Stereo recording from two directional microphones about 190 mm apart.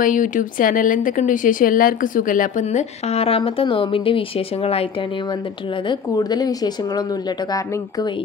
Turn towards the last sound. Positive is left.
turn(degrees=20)  # may be behind; listen again after turning